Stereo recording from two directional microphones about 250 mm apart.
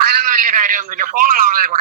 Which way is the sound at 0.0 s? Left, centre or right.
Right.